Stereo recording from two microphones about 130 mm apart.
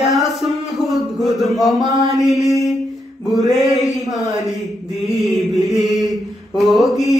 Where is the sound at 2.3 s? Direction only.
Centre (ahead or behind).